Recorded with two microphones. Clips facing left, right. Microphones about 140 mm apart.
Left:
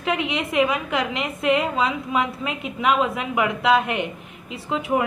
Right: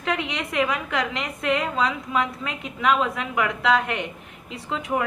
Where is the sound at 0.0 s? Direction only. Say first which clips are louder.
Left 3 dB; 10° left (ahead or behind).